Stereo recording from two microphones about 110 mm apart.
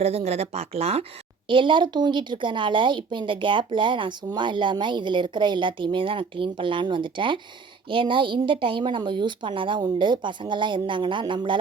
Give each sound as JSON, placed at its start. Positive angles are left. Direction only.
{"t": 0.0, "sound": "speech", "side_deg": -70}
{"t": 1.5, "sound": "a woman's voice", "side_deg": -50}